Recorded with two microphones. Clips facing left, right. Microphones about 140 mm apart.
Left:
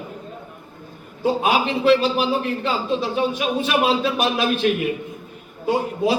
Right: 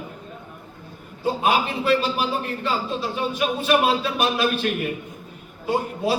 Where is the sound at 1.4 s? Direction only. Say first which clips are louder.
Even; 50° right (ahead or behind).